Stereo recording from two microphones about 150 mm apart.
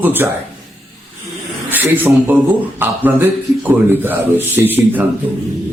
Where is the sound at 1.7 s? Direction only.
15° right (ahead or behind).